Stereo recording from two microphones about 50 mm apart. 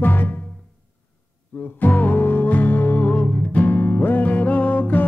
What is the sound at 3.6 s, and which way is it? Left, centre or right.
Music, left.